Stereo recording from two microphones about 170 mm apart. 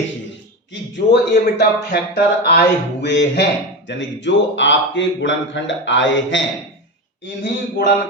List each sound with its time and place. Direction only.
0.7 s a man's voice: 90° left